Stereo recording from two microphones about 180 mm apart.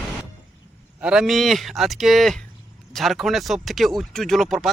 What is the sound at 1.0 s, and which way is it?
Speech, 5° right (ahead or behind).